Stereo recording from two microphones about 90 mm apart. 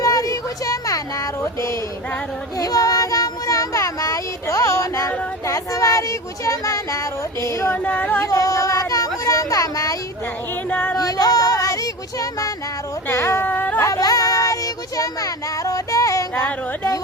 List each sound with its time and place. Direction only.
0.0 s a sound: 40° left (ahead or behind)
2.6 s child singing: 40° left (ahead or behind)
7.9 s music: 15° left (ahead or behind)
8.2 s speech: 40° left (ahead or behind)
10.7 s speech: 15° left (ahead or behind)
10.9 s child singing: 45° left (ahead or behind)
13.1 s a sound: 30° left (ahead or behind)
13.8 s child singing: 40° left (ahead or behind)
16.4 s speech: 35° left (ahead or behind)